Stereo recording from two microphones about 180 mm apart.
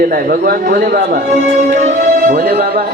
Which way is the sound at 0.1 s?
55° right (ahead or behind).